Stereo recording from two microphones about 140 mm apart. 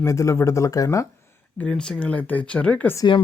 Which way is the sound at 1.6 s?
5° left (ahead or behind).